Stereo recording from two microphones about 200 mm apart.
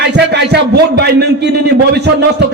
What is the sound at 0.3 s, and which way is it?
A man's voice, 55° right (ahead or behind).